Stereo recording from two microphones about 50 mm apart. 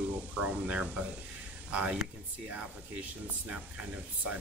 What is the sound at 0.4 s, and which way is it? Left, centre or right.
Speech, right.